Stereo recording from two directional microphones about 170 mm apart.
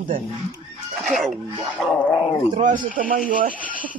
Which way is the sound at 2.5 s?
50° right (ahead or behind).